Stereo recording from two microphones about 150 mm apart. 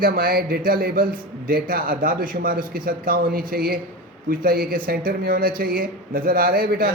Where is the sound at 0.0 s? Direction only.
75° right (ahead or behind).